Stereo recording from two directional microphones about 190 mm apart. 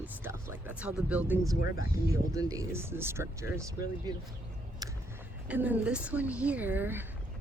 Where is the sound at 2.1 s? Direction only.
15° right (ahead or behind).